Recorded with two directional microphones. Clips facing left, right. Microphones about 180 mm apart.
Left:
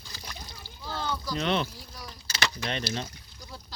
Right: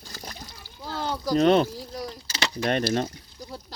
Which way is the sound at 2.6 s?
50° right (ahead or behind).